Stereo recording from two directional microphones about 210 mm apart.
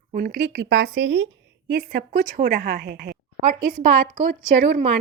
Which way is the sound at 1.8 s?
40° right (ahead or behind).